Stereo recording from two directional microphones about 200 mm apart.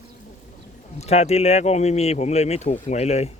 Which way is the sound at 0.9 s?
35° left (ahead or behind).